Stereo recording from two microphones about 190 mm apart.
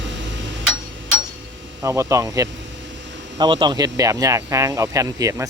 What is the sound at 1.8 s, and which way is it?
Speech, 15° right (ahead or behind).